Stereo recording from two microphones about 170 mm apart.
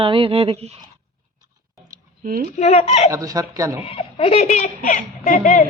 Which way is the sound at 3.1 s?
20° right (ahead or behind).